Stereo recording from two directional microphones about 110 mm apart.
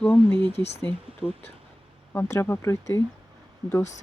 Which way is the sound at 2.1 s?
25° left (ahead or behind).